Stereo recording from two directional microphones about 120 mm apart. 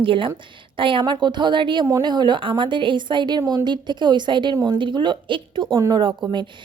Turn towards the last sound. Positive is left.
turn(degrees=-40)  # may be behind; listen again after turning